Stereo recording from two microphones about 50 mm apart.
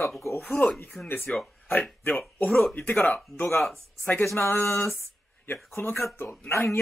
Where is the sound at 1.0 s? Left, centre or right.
Left.